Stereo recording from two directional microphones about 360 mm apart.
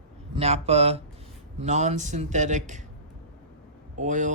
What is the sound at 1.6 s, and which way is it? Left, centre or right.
Speech, centre.